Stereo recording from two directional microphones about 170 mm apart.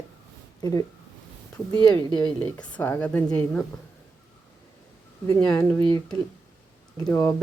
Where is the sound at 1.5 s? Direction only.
5° left (ahead or behind).